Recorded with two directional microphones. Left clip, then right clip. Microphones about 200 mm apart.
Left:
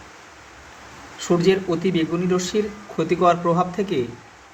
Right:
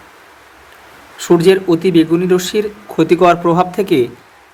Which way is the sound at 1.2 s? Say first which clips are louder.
Right 9 dB; 45° right (ahead or behind).